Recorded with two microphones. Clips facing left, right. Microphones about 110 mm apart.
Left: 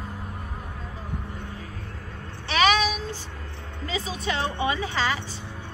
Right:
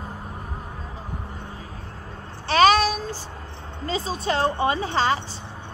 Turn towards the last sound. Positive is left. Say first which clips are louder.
# right 4 dB
turn(degrees=-30)  # may be behind; listen again after turning